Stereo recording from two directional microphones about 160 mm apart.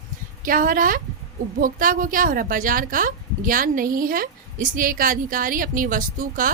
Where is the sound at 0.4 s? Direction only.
60° right (ahead or behind).